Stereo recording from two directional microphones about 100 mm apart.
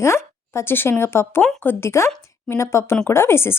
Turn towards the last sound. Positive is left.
turn(degrees=25)  # may be behind; listen again after turning